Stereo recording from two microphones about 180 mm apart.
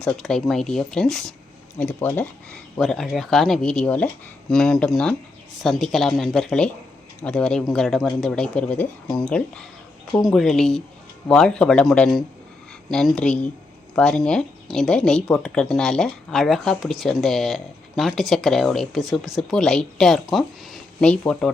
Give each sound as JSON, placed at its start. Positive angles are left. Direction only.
{"t": 0.0, "sound": "speech", "side_deg": 5}